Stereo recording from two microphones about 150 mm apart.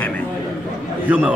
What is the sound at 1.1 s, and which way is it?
Speech, 10° right (ahead or behind).